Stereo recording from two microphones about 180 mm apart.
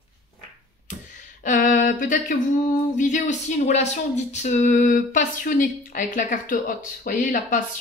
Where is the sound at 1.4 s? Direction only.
45° left (ahead or behind).